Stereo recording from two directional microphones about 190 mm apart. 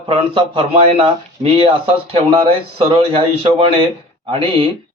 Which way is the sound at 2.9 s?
30° right (ahead or behind).